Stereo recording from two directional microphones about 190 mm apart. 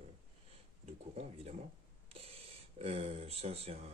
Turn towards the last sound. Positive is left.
turn(degrees=-35)  # may be behind; listen again after turning